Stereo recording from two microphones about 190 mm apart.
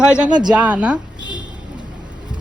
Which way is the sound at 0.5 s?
5° right (ahead or behind).